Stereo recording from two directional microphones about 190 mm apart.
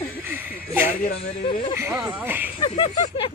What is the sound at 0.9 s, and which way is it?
Speech, 40° left (ahead or behind).